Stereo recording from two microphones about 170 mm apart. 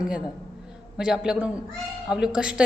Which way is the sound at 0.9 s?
5° right (ahead or behind).